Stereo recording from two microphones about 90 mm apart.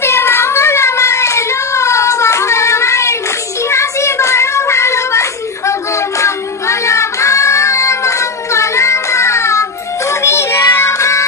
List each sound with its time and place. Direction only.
0.0 s child singing: 30° left (ahead or behind)